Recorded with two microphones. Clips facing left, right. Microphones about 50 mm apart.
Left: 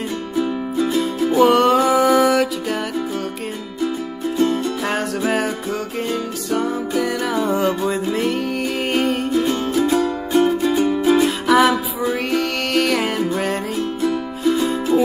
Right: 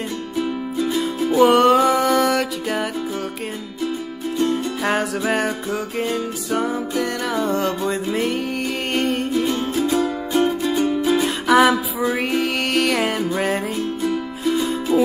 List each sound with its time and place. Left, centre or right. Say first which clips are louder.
0.4 s music: left 3 dB; centre
4.4 s music: left 2 dB; centre